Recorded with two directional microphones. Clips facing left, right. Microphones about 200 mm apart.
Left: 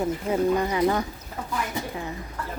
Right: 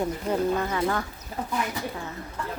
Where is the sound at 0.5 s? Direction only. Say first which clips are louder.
Left 4 dB; 15° left (ahead or behind).